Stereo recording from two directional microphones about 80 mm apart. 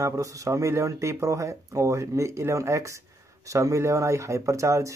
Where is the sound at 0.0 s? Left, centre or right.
Right.